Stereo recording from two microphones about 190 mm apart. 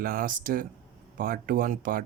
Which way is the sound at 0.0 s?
50° right (ahead or behind).